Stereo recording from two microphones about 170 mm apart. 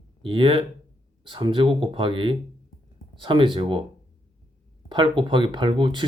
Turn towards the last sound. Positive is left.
turn(degrees=-30)  # may be behind; listen again after turning